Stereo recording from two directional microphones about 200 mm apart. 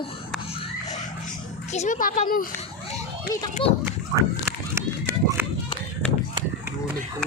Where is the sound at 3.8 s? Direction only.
15° right (ahead or behind).